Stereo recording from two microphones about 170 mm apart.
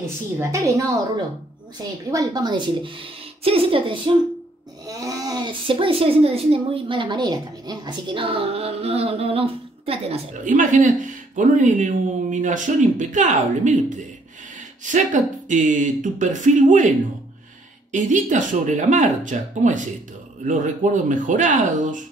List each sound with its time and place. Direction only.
0.0 s a woman's voice: 15° right (ahead or behind)
2.0 s a woman's voice: 20° right (ahead or behind); by 13.9 s 45° right (ahead or behind)
15.4 s speech: 50° right (ahead or behind)
17.9 s speech: 45° right (ahead or behind)